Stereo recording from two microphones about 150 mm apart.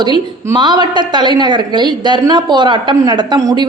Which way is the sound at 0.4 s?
30° right (ahead or behind).